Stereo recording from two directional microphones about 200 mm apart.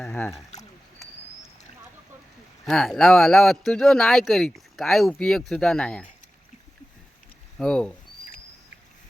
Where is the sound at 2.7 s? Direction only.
Centre (ahead or behind).